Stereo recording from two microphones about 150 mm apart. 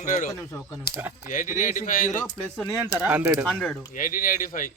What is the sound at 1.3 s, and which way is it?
Speech, 60° left (ahead or behind).